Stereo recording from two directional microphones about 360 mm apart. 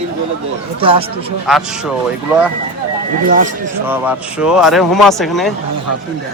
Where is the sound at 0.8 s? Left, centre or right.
Centre.